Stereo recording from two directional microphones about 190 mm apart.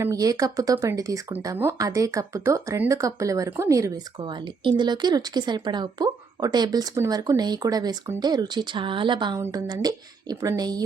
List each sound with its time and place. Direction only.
0.0 s speech: 20° right (ahead or behind)